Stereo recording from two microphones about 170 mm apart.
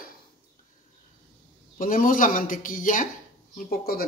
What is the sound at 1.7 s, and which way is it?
Speech, 55° left (ahead or behind).